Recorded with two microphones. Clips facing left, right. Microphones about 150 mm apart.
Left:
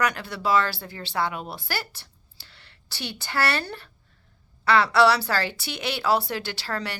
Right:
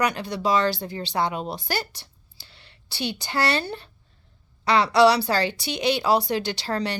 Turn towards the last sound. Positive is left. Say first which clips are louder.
# right 5 dB
turn(degrees=-20)  # may be behind; listen again after turning